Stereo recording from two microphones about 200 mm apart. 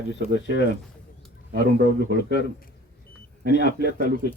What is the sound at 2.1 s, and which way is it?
A man's voice, 60° left (ahead or behind).